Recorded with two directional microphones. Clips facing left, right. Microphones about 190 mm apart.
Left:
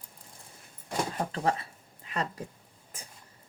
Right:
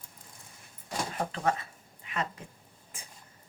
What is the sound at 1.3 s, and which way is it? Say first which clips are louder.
Speech: left 1 dB; 30° left (ahead or behind).